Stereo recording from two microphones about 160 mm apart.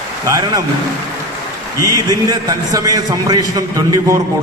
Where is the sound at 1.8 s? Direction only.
20° right (ahead or behind).